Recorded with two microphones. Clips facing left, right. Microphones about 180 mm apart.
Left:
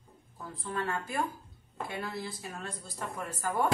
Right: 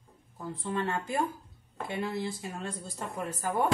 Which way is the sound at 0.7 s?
20° right (ahead or behind).